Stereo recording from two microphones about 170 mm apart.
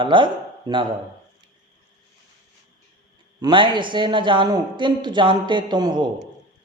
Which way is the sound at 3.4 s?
30° right (ahead or behind).